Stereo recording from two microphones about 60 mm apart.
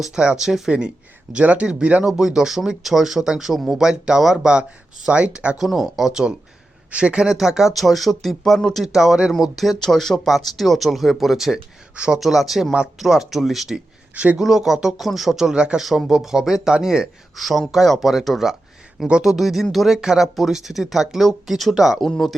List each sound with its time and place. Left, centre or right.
0.0 s speech: centre
1.3 s speech: right
2.0 s speech: centre
5.5 s speech: centre
11.9 s speech: centre
12.2 s speech: centre
13.7 s a sound: right
14.3 s speech: centre
15.8 s speech: centre
17.3 s speech: centre